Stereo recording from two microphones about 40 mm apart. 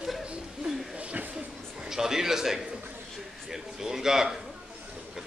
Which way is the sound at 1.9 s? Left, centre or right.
Centre.